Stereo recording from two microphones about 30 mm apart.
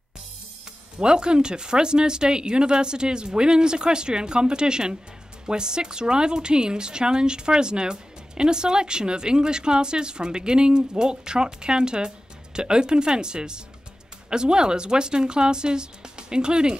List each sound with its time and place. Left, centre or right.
0.9 s a woman's voice: right